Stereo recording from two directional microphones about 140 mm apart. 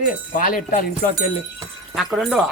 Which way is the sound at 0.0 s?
75° left (ahead or behind).